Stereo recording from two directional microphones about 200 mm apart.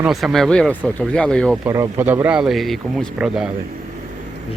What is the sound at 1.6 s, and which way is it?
Speech, 15° right (ahead or behind).